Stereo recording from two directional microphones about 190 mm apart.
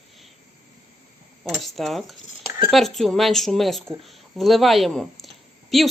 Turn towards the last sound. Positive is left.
turn(degrees=0)  # may be behind; listen again after turning